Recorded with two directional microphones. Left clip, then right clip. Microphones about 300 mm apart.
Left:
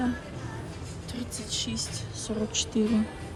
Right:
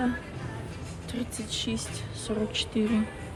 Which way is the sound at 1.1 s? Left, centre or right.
Centre.